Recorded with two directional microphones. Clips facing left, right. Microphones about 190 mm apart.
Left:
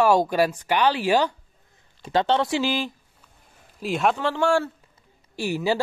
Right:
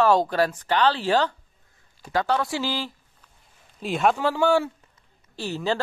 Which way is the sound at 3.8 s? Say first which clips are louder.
Right 1 dB; centre (ahead or behind).